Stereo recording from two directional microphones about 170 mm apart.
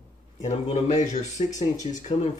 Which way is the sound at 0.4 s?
45° left (ahead or behind).